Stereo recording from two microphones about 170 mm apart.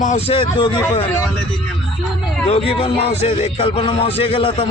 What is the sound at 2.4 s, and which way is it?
Speech, 35° left (ahead or behind).